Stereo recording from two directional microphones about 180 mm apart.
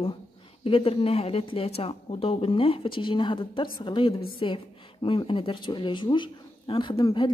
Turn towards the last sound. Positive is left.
turn(degrees=30)  # may be behind; listen again after turning